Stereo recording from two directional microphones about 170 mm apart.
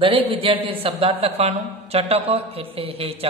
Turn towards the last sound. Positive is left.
turn(degrees=-35)  # may be behind; listen again after turning